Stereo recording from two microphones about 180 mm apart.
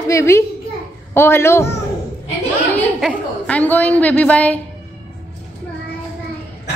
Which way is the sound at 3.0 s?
10° left (ahead or behind).